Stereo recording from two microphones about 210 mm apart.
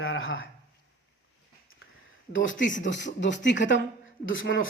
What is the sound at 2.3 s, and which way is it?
Speech, 65° left (ahead or behind).